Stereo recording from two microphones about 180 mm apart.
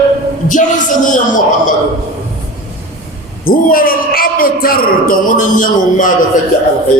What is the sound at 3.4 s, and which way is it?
Speech, 50° left (ahead or behind).